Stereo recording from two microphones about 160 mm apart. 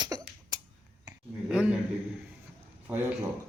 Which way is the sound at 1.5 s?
5° right (ahead or behind).